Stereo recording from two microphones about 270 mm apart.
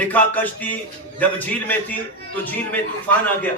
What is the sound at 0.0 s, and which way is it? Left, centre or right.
A man's voice, centre.